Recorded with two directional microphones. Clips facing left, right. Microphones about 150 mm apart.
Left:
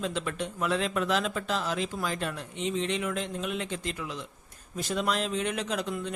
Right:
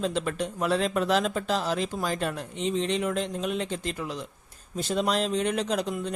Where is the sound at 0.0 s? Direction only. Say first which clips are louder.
Right 4 dB; 40° right (ahead or behind).